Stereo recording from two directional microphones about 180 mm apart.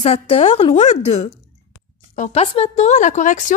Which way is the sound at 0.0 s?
35° left (ahead or behind).